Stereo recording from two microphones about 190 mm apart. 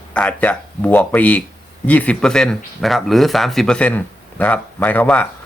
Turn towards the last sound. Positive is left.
turn(degrees=5)  # may be behind; listen again after turning